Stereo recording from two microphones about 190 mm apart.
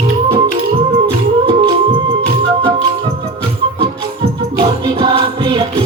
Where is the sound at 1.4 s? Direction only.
30° right (ahead or behind).